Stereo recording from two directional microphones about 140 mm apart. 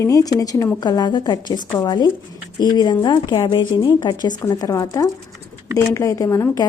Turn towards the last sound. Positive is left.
turn(degrees=25)  # may be behind; listen again after turning